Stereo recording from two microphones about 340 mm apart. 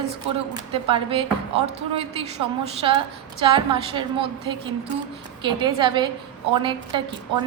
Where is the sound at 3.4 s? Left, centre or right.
Centre.